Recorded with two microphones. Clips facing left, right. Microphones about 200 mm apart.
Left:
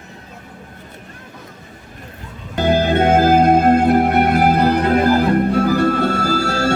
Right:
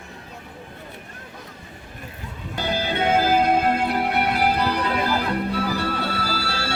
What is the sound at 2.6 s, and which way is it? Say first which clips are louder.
Music: left 9 dB; 50° left (ahead or behind).